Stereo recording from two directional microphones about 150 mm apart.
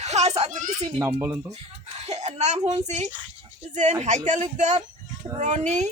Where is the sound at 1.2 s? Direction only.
20° right (ahead or behind).